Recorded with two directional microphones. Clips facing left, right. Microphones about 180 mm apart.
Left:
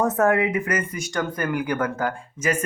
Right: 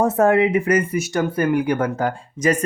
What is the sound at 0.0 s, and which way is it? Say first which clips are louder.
Speech: right 4 dB; 30° right (ahead or behind).